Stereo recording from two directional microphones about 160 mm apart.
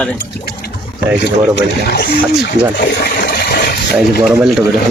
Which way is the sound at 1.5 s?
90° left.